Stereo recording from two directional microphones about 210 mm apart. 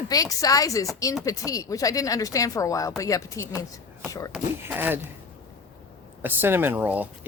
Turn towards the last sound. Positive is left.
turn(degrees=-10)  # may be behind; listen again after turning